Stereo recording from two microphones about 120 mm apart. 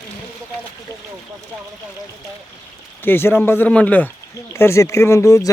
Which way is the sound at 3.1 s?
20° left (ahead or behind).